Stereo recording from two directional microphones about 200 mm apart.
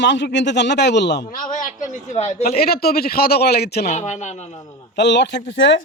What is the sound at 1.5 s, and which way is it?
Speech, 35° left (ahead or behind).